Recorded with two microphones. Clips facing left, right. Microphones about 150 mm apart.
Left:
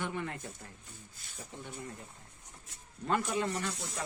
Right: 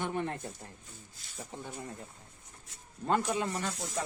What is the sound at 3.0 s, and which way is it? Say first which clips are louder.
Speech: right 2 dB; 30° right (ahead or behind).